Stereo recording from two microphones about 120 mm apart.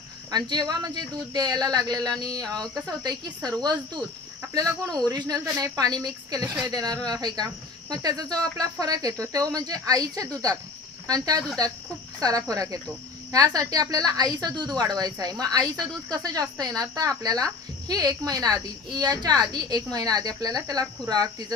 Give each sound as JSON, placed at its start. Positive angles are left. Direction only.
{"t": 0.3, "sound": "speech", "side_deg": -35}
{"t": 5.1, "sound": "speech", "side_deg": -30}
{"t": 12.2, "sound": "cricket", "side_deg": -30}
{"t": 13.3, "sound": "speech", "side_deg": -30}